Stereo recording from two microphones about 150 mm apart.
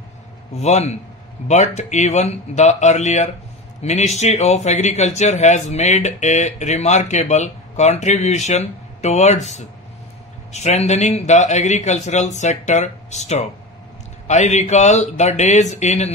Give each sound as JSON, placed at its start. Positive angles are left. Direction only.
{"t": 0.6, "sound": "speech", "side_deg": 50}